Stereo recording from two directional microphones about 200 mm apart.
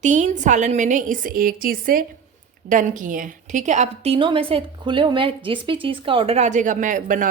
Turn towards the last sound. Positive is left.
turn(degrees=-40)  # may be behind; listen again after turning